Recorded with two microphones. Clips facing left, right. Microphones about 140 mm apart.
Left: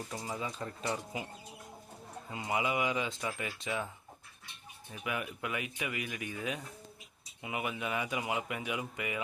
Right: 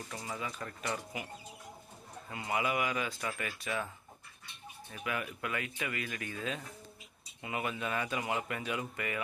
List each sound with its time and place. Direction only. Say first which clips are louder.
0.1 s speech: even; 20° left (ahead or behind)
2.3 s speech: even; 20° left (ahead or behind)
4.9 s speech: even; 15° left (ahead or behind)